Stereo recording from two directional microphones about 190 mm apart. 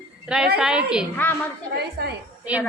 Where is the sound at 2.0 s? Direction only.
55° right (ahead or behind).